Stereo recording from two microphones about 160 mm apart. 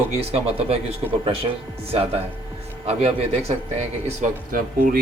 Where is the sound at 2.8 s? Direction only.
40° right (ahead or behind).